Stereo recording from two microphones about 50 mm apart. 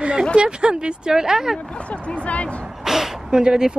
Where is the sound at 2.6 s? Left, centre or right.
Centre.